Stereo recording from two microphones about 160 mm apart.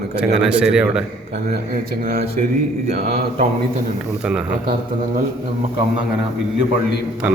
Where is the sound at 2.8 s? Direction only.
45° right (ahead or behind).